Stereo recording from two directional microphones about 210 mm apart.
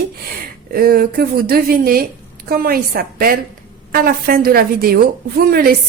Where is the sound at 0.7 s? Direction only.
45° right (ahead or behind).